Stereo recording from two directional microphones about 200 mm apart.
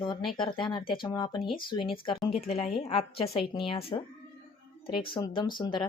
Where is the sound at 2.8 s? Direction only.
30° left (ahead or behind).